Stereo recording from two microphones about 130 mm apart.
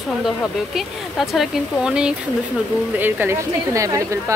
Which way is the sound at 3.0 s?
15° right (ahead or behind).